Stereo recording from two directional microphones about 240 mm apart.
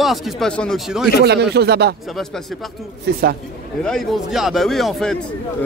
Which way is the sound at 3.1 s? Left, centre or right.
Right.